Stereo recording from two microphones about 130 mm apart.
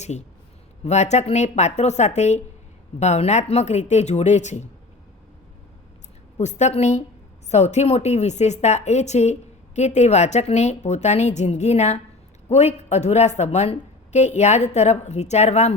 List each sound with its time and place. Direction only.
0.0 s speech: 60° left (ahead or behind)
6.3 s speech: 60° left (ahead or behind)